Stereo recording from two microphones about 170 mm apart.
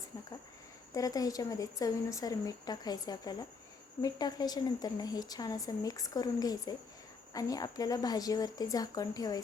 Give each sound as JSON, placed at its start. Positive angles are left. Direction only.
{"t": 0.9, "sound": "a woman's voice", "side_deg": 20}